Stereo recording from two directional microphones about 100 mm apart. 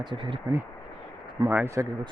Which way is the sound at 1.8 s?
25° right (ahead or behind).